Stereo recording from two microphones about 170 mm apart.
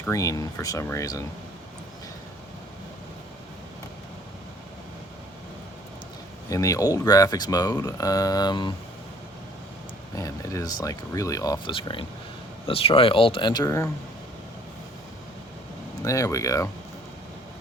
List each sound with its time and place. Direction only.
0.0 s speech: 20° left (ahead or behind)
6.5 s speech: 20° left (ahead or behind)
10.2 s speech: 20° left (ahead or behind)
16.0 s speech: 20° left (ahead or behind)